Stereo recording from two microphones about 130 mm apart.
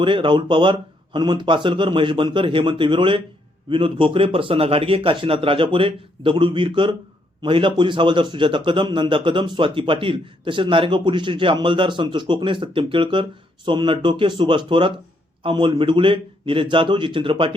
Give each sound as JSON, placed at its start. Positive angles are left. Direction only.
{"t": 0.0, "sound": "speech", "side_deg": -40}